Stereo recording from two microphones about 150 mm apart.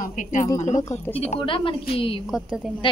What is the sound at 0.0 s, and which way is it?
A woman's voice, 60° left (ahead or behind).